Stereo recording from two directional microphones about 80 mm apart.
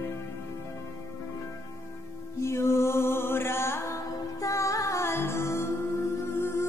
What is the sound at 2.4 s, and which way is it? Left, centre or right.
Music, left.